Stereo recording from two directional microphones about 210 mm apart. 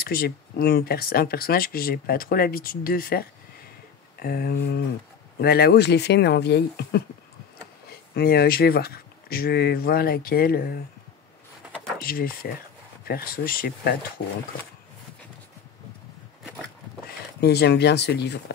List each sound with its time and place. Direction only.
0.0 s speech: 45° left (ahead or behind)
8.1 s speech: 50° left (ahead or behind)
12.0 s speech: 45° left (ahead or behind)
17.4 s speech: 50° left (ahead or behind)